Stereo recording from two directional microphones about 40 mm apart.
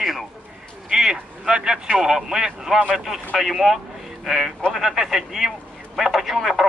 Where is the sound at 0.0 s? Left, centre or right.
Centre.